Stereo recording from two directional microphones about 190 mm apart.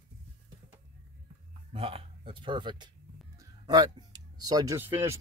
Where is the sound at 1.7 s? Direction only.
30° right (ahead or behind).